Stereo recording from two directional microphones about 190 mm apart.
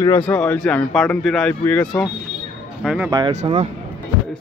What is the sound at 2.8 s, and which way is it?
Speech, centre (ahead or behind).